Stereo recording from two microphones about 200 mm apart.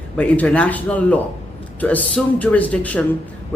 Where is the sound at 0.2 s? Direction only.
5° left (ahead or behind).